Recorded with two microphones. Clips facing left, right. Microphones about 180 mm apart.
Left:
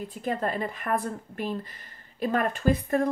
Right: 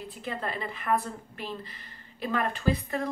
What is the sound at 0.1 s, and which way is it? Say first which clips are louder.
A woman's voice: left 6 dB; 45° left (ahead or behind).